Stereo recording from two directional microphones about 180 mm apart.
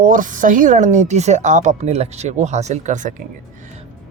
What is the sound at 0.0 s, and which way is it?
Speech, 45° right (ahead or behind).